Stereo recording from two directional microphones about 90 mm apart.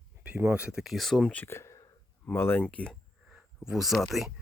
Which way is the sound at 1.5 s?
30° left (ahead or behind).